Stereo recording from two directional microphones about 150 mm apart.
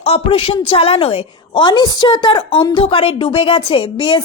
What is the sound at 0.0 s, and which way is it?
A woman's voice, 40° left (ahead or behind).